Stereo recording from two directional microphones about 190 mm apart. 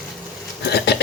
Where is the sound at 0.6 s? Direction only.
60° left (ahead or behind).